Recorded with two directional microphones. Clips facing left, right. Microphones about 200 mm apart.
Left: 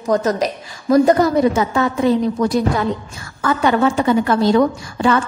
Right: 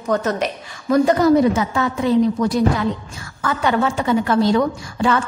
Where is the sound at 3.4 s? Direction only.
45° left (ahead or behind).